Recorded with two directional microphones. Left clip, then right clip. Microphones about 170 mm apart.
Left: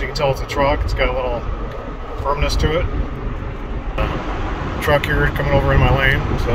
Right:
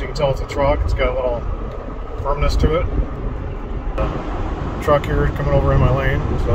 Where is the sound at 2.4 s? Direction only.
20° right (ahead or behind).